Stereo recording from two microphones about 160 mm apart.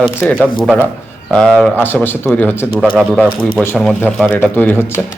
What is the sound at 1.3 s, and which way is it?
Speech, 5° left (ahead or behind).